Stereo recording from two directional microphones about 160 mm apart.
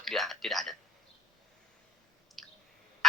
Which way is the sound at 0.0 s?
Centre (ahead or behind).